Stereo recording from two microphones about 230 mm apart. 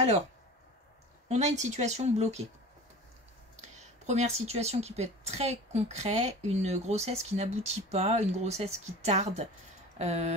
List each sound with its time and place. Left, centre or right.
1.3 s speech: right
4.0 s speech: right